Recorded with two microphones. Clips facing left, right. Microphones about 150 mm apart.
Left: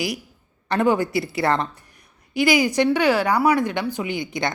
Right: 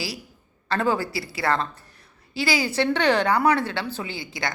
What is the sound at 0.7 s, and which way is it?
A woman's voice, 20° left (ahead or behind).